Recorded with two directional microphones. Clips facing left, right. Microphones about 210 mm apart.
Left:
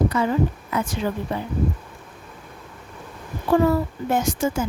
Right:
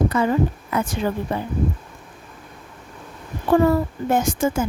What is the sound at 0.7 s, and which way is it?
Speech, 50° right (ahead or behind).